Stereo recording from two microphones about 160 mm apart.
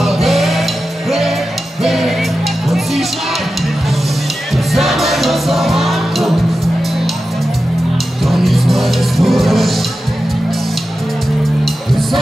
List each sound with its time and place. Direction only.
0.0 s music: centre (ahead or behind)
1.8 s music: centre (ahead or behind)
4.7 s music: centre (ahead or behind)
8.3 s music: centre (ahead or behind)